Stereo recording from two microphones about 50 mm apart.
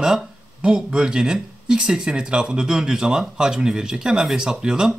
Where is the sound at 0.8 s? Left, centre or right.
Centre.